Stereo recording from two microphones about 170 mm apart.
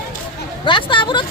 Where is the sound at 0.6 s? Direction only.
30° left (ahead or behind).